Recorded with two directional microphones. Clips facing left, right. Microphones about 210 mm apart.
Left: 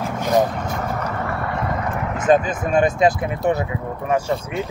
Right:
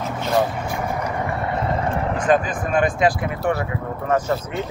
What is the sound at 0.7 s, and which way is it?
Vehicle, 10° right (ahead or behind).